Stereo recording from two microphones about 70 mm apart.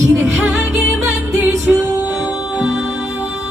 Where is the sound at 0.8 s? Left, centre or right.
Centre.